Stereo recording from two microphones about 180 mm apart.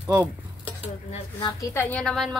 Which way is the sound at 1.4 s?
25° left (ahead or behind).